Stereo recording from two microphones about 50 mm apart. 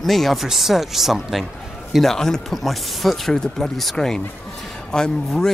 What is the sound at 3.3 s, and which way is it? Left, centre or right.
Speech, centre.